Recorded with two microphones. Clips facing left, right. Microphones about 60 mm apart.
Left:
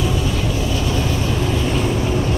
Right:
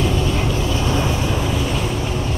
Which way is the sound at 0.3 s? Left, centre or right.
Right.